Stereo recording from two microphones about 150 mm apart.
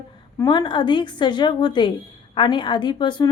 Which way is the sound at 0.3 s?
30° left (ahead or behind).